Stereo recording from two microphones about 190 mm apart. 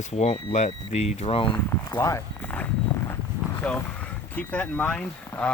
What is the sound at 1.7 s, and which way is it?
Speech, 15° left (ahead or behind).